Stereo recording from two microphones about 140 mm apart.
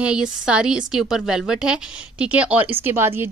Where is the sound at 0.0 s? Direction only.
5° right (ahead or behind).